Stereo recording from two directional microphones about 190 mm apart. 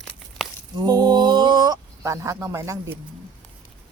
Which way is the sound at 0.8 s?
20° right (ahead or behind).